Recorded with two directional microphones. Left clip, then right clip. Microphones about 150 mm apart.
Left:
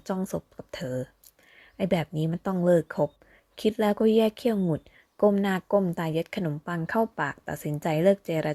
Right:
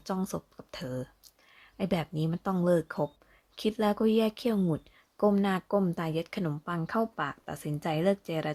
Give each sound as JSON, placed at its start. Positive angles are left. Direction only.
{"t": 0.3, "sound": "a woman's voice", "side_deg": 20}